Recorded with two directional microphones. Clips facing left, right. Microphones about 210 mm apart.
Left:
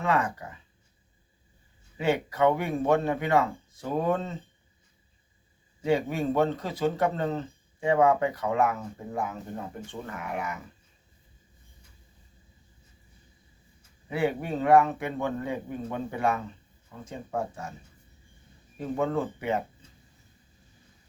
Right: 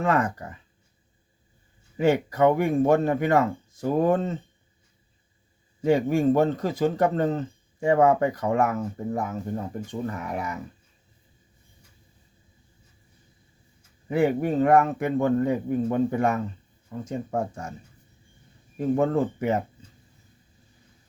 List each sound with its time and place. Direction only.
0.0 s speech: 45° right (ahead or behind)
2.0 s speech: 45° right (ahead or behind)
5.8 s speech: 45° right (ahead or behind)
14.1 s speech: 45° right (ahead or behind)
18.8 s speech: 45° right (ahead or behind)